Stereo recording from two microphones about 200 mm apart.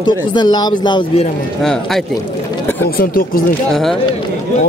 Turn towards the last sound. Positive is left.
turn(degrees=0)  # may be behind; listen again after turning